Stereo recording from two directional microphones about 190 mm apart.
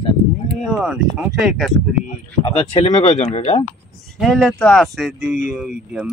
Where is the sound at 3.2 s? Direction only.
35° left (ahead or behind).